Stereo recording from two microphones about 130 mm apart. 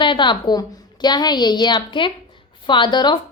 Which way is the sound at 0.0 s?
40° left (ahead or behind).